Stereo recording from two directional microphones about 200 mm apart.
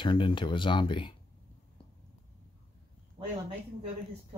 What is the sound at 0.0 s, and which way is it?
Speech, 25° left (ahead or behind).